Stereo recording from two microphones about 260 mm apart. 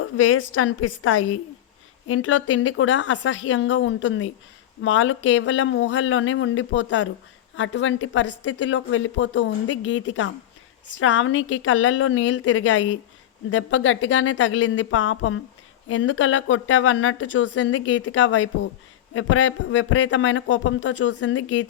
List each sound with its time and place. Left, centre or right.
0.0 s a woman's voice: left